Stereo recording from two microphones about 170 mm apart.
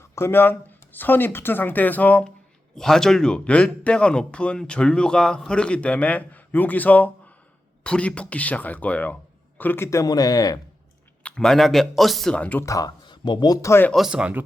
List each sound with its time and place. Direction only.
0.0 s a man's voice: 15° left (ahead or behind)
11.2 s speech: 5° left (ahead or behind)
13.9 s a man's voice: 5° right (ahead or behind)